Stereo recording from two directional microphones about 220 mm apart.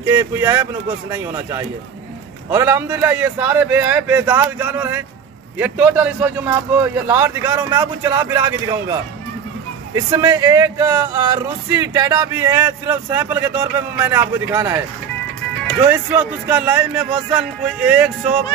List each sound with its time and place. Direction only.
0.0 s speech: 10° right (ahead or behind)
9.9 s speech: 15° right (ahead or behind)
15.9 s speech: 5° right (ahead or behind)